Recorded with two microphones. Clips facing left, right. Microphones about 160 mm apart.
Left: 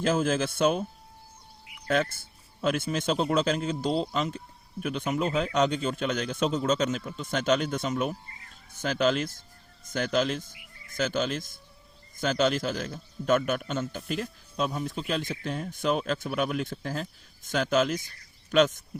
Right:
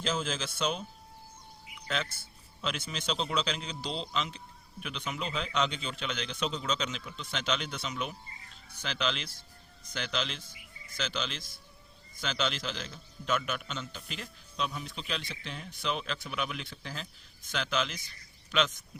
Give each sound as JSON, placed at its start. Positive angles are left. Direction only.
{"t": 0.0, "sound": "a man's voice", "side_deg": 50}
{"t": 1.9, "sound": "a man's voice", "side_deg": 50}